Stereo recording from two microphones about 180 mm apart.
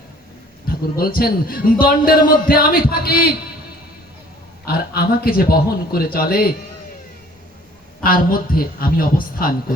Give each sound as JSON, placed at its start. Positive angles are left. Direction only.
{"t": 0.7, "sound": "a man's voice", "side_deg": 55}
{"t": 4.6, "sound": "a man's voice", "side_deg": 55}
{"t": 8.0, "sound": "a woman's voice", "side_deg": 55}